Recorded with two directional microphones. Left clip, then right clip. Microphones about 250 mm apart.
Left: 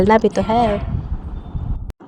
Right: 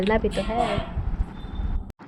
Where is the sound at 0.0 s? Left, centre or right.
Centre.